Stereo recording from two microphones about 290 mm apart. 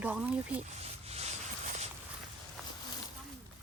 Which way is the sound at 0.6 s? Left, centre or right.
Right.